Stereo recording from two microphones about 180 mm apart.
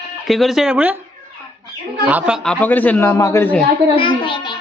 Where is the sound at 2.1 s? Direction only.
5° right (ahead or behind).